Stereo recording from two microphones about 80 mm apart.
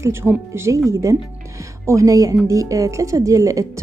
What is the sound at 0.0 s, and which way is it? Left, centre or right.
Speech, right.